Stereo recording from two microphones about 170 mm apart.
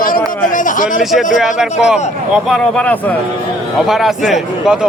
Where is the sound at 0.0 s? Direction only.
55° left (ahead or behind).